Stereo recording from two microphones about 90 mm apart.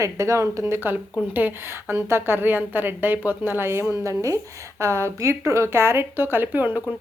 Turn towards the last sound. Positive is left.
turn(degrees=-20)  # may be behind; listen again after turning